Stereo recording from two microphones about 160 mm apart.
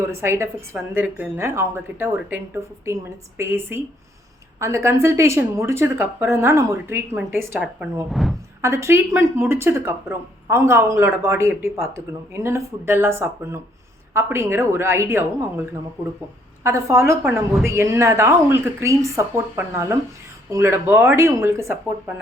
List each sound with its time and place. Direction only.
0.0 s speech: 15° right (ahead or behind); by 8.4 s centre (ahead or behind)
8.6 s speech: 15° right (ahead or behind)
16.6 s speech: 15° right (ahead or behind)